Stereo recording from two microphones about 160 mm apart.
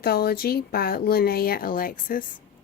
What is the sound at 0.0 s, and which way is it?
Speech, 75° left (ahead or behind).